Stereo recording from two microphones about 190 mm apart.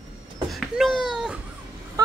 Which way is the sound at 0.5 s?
Centre (ahead or behind).